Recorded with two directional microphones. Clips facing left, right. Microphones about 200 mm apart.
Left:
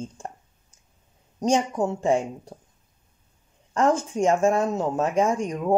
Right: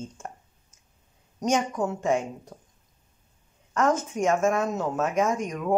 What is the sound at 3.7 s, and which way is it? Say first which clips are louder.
Speech: left 2 dB; 30° left (ahead or behind).